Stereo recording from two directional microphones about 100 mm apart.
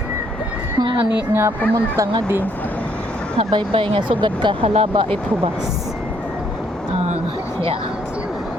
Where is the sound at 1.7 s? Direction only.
35° right (ahead or behind).